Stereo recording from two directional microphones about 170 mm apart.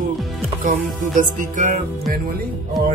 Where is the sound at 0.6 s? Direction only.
50° right (ahead or behind).